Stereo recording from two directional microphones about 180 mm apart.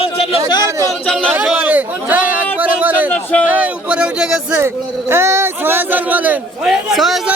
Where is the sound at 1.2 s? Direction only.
10° right (ahead or behind).